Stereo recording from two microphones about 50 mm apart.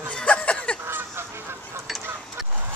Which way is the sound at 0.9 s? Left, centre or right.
Right.